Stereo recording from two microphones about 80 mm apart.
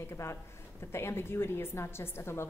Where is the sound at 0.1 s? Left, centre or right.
Left.